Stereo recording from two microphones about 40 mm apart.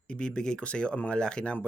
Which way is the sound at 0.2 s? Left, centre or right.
Left.